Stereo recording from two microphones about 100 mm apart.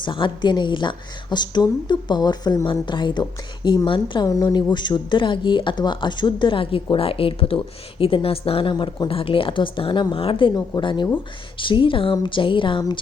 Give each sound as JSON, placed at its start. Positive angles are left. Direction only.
{"t": 0.0, "sound": "a woman's voice", "side_deg": 50}
{"t": 4.3, "sound": "a woman's voice", "side_deg": 35}
{"t": 8.7, "sound": "a woman's voice", "side_deg": 45}
{"t": 9.0, "sound": "speech", "side_deg": 65}
{"t": 10.5, "sound": "a woman's voice", "side_deg": 50}